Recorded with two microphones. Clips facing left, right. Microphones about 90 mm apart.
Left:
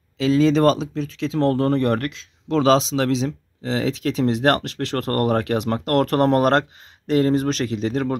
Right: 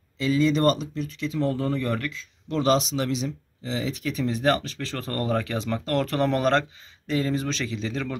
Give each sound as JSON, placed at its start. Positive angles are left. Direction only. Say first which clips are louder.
{"t": 0.2, "sound": "speech", "louder": "left 5 dB", "side_deg": 90}